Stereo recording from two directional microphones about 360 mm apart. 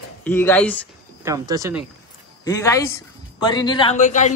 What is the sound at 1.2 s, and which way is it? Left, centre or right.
Speech, centre.